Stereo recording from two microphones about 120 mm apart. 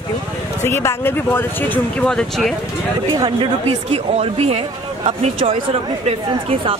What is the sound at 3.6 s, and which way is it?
Speech, 60° right (ahead or behind).